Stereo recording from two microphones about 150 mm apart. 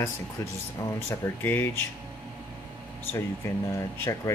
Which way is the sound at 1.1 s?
15° left (ahead or behind).